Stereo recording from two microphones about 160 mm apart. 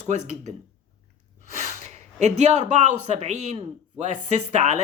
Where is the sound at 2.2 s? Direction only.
45° right (ahead or behind).